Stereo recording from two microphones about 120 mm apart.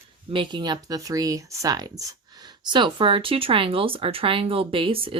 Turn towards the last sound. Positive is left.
turn(degrees=-50)  # may be behind; listen again after turning